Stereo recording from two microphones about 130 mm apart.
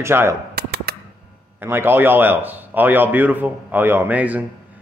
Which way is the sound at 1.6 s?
15° right (ahead or behind).